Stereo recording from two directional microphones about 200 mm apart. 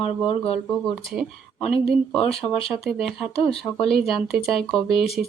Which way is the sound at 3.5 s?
Centre (ahead or behind).